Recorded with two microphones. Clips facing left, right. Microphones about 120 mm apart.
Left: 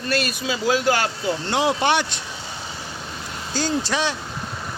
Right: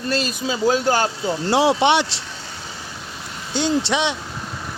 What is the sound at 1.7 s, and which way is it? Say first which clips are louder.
Speech: right 2 dB; 25° right (ahead or behind).